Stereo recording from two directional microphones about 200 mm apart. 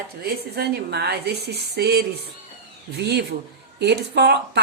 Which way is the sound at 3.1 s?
55° right (ahead or behind).